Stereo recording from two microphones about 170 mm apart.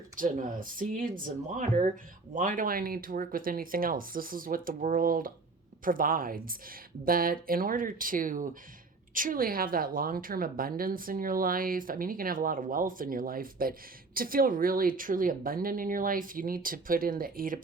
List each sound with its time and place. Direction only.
0.2 s a woman's voice: 55° right (ahead or behind)